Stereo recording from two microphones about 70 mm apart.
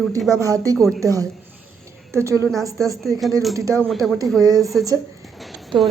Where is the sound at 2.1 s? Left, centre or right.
Right.